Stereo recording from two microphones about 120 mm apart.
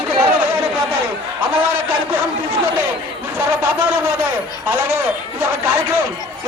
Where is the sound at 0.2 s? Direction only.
20° right (ahead or behind).